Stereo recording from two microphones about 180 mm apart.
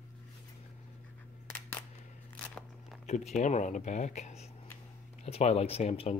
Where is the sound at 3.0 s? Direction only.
40° left (ahead or behind).